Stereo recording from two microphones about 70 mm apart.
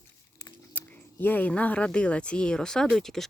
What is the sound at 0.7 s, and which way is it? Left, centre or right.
Speech, left.